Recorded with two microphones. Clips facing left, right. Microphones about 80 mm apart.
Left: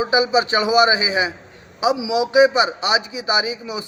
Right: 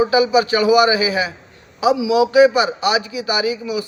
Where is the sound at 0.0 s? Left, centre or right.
Left.